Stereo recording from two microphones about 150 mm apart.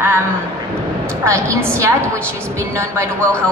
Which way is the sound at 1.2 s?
20° right (ahead or behind).